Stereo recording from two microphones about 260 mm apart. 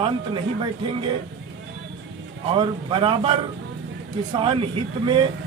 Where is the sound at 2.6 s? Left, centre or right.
Centre.